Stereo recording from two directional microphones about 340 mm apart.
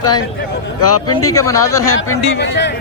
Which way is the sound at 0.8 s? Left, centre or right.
Left.